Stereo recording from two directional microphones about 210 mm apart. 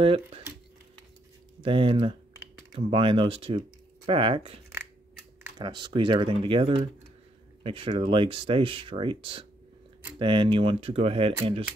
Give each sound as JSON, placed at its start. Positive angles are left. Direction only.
{"t": 0.0, "sound": "speech", "side_deg": -25}
{"t": 1.6, "sound": "speech", "side_deg": -25}
{"t": 5.6, "sound": "speech", "side_deg": -20}